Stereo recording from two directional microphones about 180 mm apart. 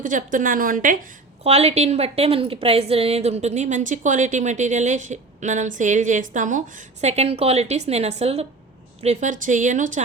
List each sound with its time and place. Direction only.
0.0 s a woman's voice: 45° right (ahead or behind)
1.5 s a woman's voice: 35° right (ahead or behind)